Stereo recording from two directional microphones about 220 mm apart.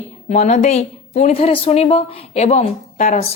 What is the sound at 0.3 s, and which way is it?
A woman's voice, 30° left (ahead or behind).